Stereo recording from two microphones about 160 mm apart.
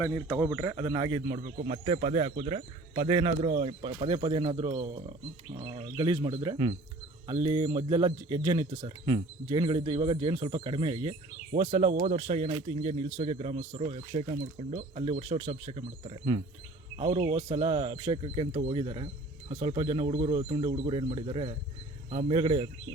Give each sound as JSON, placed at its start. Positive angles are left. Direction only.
{"t": 0.3, "sound": "speech", "side_deg": -15}
{"t": 0.8, "sound": "speech", "side_deg": -30}
{"t": 1.5, "sound": "speech", "side_deg": -40}